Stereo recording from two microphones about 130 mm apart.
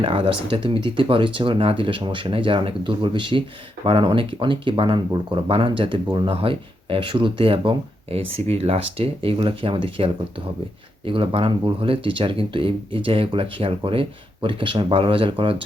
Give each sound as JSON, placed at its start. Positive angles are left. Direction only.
{"t": 0.0, "sound": "speech", "side_deg": -45}